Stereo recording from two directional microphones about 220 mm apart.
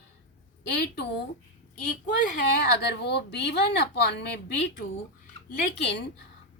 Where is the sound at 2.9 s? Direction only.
50° left (ahead or behind).